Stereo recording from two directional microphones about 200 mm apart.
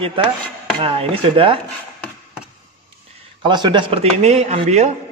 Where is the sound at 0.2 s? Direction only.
25° right (ahead or behind).